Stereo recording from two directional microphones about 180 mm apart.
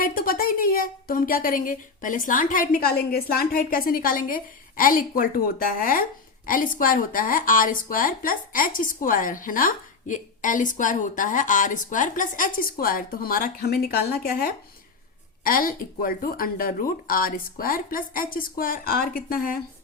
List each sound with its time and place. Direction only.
0.0 s a woman's voice: 50° left (ahead or behind)